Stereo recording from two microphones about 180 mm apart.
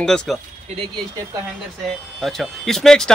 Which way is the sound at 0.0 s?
Centre (ahead or behind).